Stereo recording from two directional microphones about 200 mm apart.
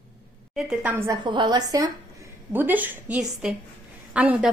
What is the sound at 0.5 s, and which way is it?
Speech, 5° right (ahead or behind).